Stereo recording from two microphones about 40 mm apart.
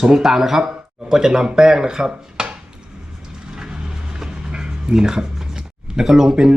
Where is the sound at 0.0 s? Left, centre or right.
Centre.